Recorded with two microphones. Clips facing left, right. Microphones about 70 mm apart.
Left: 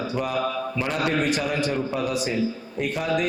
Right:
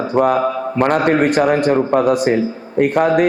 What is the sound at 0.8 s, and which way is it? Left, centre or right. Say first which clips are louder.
A man's voice: right 11 dB; right.